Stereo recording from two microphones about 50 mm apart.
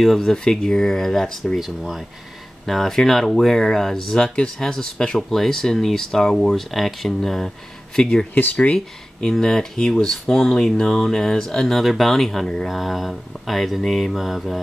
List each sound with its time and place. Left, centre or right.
0.0 s speech: centre
1.6 s mantra: centre
3.5 s speech: centre
8.4 s speech: left
8.7 s speech: centre
12.6 s mantra: centre